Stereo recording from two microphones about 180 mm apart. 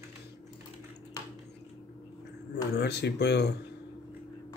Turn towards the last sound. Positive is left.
turn(degrees=70)  # may be behind; listen again after turning